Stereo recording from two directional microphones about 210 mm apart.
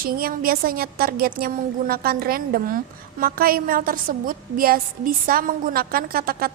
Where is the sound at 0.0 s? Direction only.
45° right (ahead or behind).